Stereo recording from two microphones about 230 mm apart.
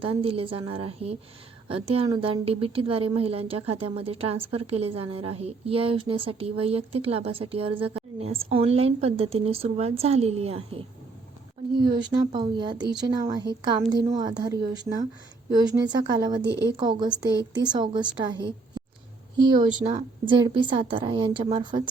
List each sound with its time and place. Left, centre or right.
0.0 s a woman's voice: right
12.0 s a woman's voice: centre